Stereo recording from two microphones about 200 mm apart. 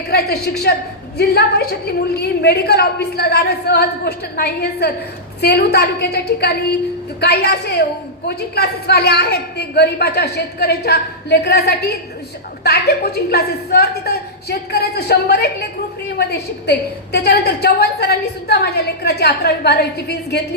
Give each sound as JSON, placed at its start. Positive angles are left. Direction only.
{"t": 0.1, "sound": "a woman's voice", "side_deg": 50}